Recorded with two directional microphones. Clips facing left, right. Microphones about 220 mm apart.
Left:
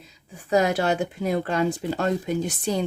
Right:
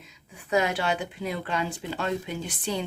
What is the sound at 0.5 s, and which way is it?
Speech, 40° left (ahead or behind).